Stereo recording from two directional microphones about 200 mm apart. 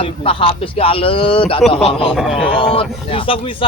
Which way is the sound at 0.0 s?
25° left (ahead or behind).